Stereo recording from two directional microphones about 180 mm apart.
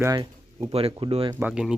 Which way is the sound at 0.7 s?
35° right (ahead or behind).